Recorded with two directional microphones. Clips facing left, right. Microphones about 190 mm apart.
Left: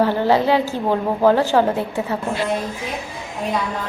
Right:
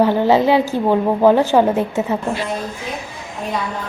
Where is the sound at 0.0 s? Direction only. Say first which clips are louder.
Right 3 dB; 15° right (ahead or behind).